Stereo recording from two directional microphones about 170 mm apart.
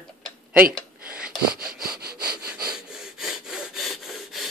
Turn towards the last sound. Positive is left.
turn(degrees=0)  # may be behind; listen again after turning